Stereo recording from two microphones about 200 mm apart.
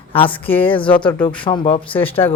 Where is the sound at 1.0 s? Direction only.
10° left (ahead or behind).